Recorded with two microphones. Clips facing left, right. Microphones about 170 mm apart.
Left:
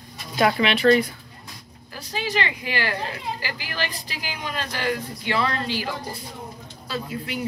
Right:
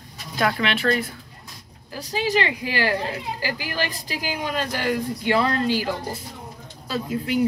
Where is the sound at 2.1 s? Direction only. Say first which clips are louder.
Right 4 dB; 35° right (ahead or behind).